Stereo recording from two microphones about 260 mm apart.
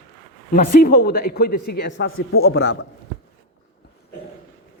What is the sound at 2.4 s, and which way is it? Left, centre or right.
Speech, left.